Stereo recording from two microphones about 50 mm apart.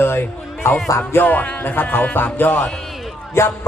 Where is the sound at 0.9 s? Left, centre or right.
Left.